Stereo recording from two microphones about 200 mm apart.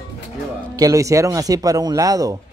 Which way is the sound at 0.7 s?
15° right (ahead or behind).